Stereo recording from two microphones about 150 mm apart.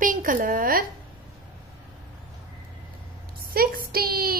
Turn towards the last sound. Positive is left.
turn(degrees=-80)